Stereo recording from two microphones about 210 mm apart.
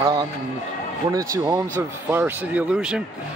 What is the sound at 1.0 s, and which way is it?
Speech, 15° right (ahead or behind).